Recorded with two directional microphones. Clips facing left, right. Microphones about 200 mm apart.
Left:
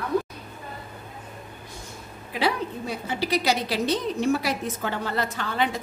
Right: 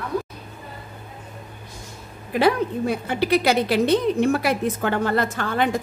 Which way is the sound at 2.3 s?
55° right (ahead or behind).